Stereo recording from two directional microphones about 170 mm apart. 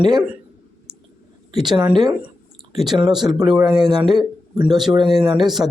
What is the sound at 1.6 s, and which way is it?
Speech, 25° right (ahead or behind).